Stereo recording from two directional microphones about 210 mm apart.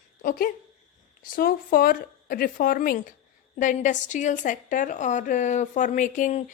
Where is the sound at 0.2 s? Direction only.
45° left (ahead or behind).